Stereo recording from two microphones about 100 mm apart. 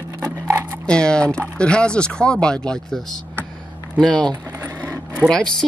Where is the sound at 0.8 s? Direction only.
10° left (ahead or behind).